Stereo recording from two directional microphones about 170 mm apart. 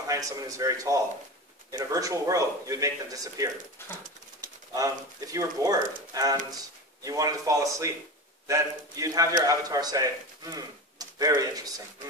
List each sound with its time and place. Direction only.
0.0 s speech: 20° right (ahead or behind)